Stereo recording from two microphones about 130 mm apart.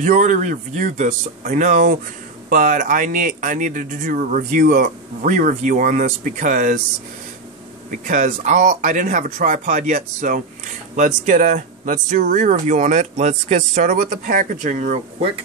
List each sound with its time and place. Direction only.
0.0 s speech: 85° right
7.9 s speech: 75° right (ahead or behind)